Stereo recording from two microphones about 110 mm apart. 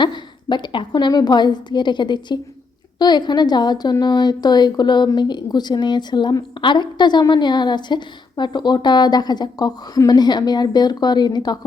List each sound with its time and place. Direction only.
0.0 s a woman's voice: 45° left (ahead or behind)